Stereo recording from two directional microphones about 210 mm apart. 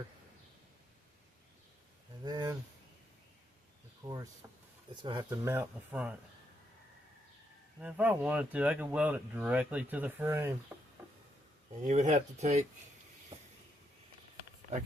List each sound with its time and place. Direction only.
2.2 s speech: 20° right (ahead or behind)
4.0 s speech: 15° right (ahead or behind)
7.8 s speech: 5° right (ahead or behind)
10.7 s a sound: 5° right (ahead or behind)
11.9 s speech: 35° right (ahead or behind)
13.3 s vehicle: 25° right (ahead or behind)